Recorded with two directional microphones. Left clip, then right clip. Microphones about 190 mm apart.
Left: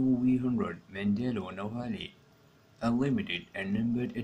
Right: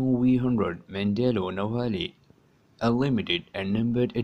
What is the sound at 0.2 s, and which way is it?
Speech, 45° right (ahead or behind).